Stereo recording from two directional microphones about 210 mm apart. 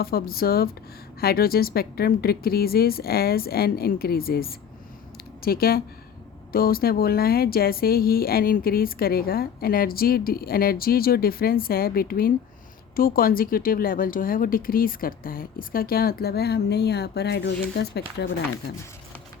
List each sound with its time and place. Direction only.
0.0 s speech: 45° left (ahead or behind)